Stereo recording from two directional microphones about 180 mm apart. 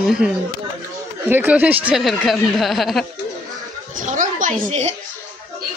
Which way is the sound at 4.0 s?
45° right (ahead or behind).